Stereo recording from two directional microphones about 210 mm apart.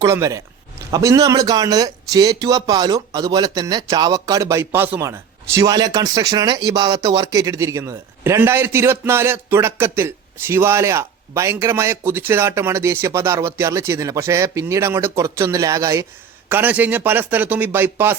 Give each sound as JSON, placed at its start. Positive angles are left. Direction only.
{"t": 0.0, "sound": "speech", "side_deg": -15}